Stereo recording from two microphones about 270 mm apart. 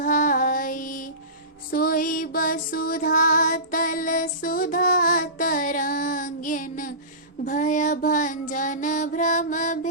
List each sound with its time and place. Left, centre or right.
0.0 s music: left
7.4 s child singing: left